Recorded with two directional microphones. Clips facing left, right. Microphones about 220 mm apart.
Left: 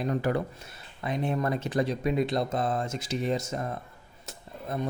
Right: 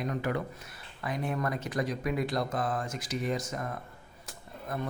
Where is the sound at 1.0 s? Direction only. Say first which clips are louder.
Left 4 dB; 25° left (ahead or behind).